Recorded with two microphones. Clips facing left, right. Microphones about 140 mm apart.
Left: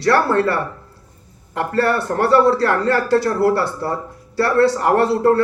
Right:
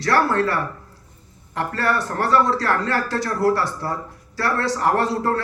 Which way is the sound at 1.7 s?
30° left (ahead or behind).